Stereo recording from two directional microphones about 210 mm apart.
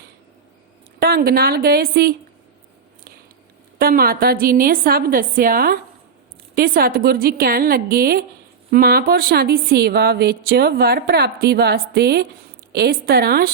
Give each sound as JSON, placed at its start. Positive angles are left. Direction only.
{"t": 0.9, "sound": "speech", "side_deg": -45}
{"t": 3.8, "sound": "speech", "side_deg": -45}